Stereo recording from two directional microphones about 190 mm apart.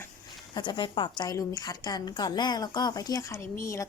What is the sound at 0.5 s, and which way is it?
A woman's voice, 25° left (ahead or behind).